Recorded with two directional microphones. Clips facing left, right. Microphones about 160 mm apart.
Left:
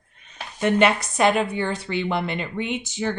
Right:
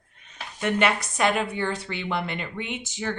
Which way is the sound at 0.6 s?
25° left (ahead or behind).